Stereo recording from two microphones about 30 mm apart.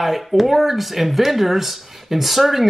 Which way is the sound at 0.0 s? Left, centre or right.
Centre.